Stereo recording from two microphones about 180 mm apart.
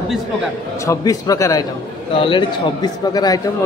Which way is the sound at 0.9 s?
20° left (ahead or behind).